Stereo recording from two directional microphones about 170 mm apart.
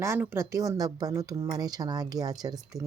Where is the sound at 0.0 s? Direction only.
15° right (ahead or behind).